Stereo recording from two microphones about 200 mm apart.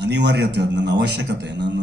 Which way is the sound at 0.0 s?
60° right (ahead or behind).